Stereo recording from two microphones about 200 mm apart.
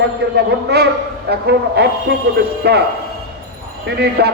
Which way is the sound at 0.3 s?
55° right (ahead or behind).